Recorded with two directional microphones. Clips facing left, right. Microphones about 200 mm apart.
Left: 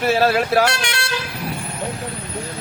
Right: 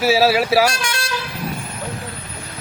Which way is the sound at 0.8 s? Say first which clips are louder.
Even; 70° left (ahead or behind).